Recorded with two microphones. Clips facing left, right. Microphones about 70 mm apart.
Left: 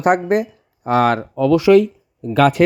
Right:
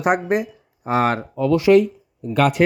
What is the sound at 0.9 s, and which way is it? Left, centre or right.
Speech, left.